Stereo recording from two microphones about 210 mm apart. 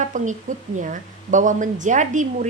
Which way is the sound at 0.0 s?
35° right (ahead or behind).